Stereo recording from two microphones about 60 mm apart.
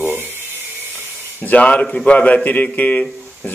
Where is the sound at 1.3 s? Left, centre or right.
Left.